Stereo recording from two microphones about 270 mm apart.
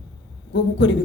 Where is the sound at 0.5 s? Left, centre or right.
Left.